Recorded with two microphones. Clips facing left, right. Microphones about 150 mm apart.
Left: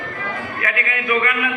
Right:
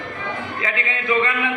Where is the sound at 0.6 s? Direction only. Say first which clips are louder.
Left 1 dB; 25° right (ahead or behind).